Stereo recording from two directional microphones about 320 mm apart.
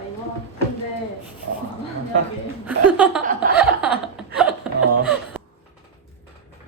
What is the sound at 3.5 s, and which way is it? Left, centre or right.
Chuckle, centre.